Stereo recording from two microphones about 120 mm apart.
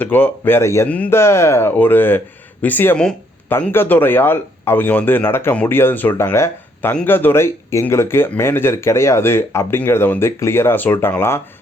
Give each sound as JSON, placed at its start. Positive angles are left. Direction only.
{"t": 0.0, "sound": "a man's voice", "side_deg": 15}
{"t": 0.9, "sound": "a man's voice", "side_deg": 10}
{"t": 1.2, "sound": "a man's voice", "side_deg": 20}